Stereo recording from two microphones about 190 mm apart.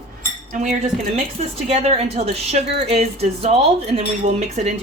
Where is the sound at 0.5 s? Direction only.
40° right (ahead or behind).